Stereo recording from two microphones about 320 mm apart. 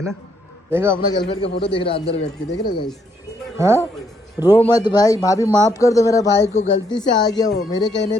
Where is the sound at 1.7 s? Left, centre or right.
Centre.